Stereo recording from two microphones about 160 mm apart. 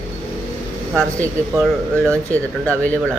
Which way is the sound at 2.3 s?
10° left (ahead or behind).